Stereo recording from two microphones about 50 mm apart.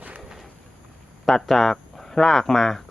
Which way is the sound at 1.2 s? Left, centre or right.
Centre.